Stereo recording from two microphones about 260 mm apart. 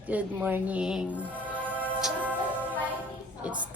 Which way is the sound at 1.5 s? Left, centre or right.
Centre.